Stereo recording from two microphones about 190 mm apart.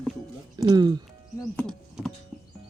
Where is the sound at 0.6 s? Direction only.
20° right (ahead or behind).